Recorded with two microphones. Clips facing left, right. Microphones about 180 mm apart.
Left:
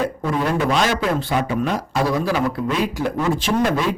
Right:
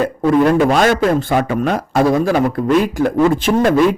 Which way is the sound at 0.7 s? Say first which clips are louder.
Right 6 dB; 50° right (ahead or behind).